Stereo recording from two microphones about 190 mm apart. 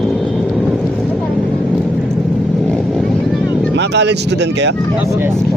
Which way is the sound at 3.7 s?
65° right (ahead or behind).